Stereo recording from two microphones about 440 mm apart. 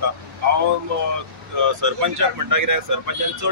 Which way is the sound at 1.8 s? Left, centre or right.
Right.